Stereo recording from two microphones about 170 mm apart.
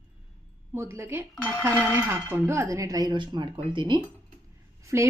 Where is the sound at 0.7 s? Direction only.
15° right (ahead or behind).